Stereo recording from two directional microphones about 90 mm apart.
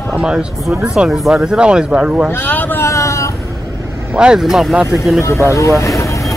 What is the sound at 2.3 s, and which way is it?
Speech, 20° left (ahead or behind).